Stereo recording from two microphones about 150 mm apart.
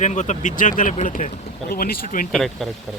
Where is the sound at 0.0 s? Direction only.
50° left (ahead or behind).